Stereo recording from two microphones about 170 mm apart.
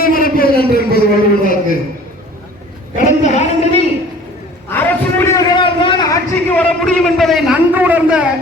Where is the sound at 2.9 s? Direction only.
45° left (ahead or behind).